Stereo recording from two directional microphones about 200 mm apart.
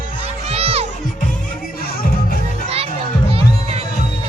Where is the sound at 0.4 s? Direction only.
30° right (ahead or behind).